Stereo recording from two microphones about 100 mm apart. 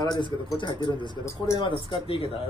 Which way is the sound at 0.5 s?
50° left (ahead or behind).